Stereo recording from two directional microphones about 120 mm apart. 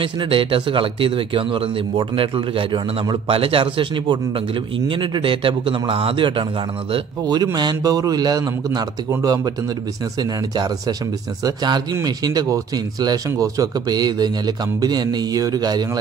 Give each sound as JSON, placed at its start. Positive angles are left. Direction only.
{"t": 0.0, "sound": "a man's voice", "side_deg": -45}
{"t": 7.5, "sound": "speech", "side_deg": -35}
{"t": 10.5, "sound": "speech", "side_deg": -35}